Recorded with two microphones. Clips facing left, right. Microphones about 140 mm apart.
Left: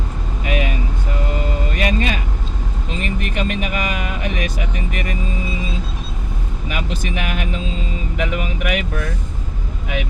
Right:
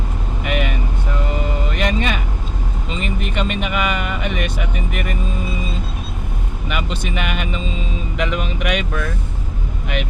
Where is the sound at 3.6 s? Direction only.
70° right (ahead or behind).